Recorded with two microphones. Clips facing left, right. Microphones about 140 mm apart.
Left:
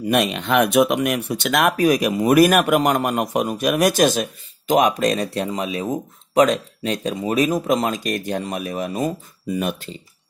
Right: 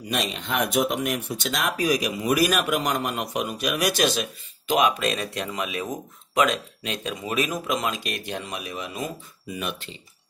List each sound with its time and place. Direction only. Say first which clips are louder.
0.1 s speech: left 9 dB; 65° left (ahead or behind); by 9.8 s 40° left (ahead or behind)